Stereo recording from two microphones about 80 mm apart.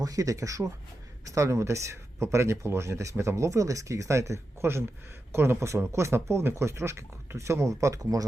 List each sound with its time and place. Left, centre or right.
0.0 s speech: right